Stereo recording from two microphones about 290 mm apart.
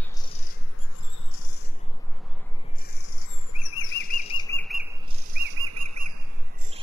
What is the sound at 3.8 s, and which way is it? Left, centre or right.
Bird flight, left.